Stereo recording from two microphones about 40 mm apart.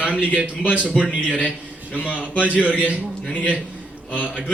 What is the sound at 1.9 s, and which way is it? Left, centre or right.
A man's voice, left.